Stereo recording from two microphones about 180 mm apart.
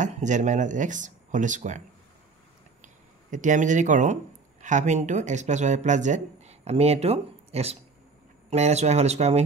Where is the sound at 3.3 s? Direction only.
45° right (ahead or behind).